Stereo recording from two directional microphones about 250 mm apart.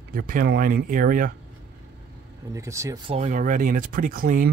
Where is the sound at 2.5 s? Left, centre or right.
Centre.